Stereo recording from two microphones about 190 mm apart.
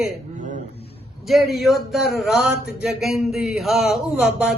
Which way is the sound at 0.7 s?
30° left (ahead or behind).